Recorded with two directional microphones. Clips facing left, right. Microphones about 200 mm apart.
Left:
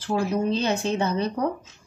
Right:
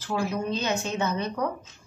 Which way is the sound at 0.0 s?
30° left (ahead or behind).